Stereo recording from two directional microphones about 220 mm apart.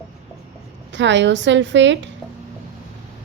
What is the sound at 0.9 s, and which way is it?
A woman's voice, 55° right (ahead or behind).